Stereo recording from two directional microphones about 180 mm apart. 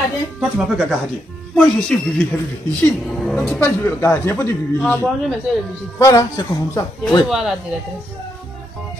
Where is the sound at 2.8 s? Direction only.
Centre (ahead or behind); by 7.2 s 20° left (ahead or behind).